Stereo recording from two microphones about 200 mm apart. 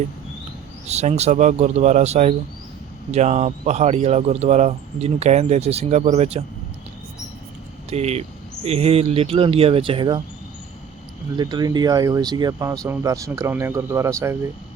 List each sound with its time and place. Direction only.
0.9 s speech: 35° right (ahead or behind)
7.9 s speech: 30° right (ahead or behind)
11.3 s speech: 20° right (ahead or behind)